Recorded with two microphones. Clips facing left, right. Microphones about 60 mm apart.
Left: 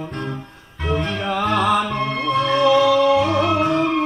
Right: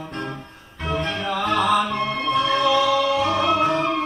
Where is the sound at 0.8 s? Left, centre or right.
Centre.